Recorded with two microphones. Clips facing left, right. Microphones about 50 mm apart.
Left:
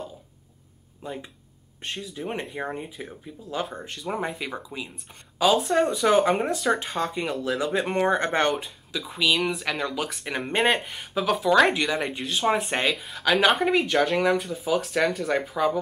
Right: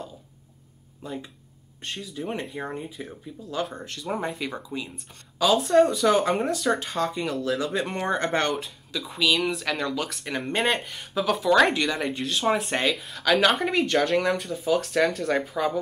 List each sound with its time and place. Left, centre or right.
1.0 s speech: centre